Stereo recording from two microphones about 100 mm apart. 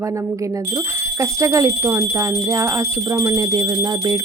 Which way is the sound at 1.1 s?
30° right (ahead or behind).